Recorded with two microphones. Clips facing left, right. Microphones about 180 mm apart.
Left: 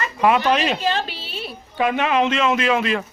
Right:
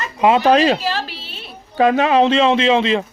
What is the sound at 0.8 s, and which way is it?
Speech, centre (ahead or behind).